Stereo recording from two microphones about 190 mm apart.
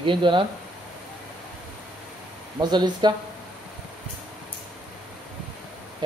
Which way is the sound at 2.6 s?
25° right (ahead or behind).